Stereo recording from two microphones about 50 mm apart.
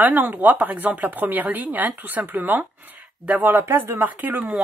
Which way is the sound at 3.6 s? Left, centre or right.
Right.